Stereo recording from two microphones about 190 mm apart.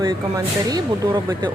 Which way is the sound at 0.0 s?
20° right (ahead or behind).